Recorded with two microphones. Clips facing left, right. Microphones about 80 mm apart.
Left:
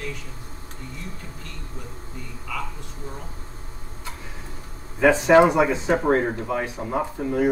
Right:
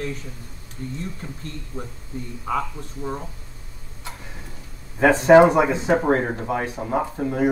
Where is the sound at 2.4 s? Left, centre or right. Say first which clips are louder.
Right 7 dB; right.